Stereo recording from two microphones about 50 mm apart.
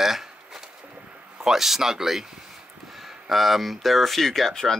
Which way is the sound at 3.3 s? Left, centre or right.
Centre.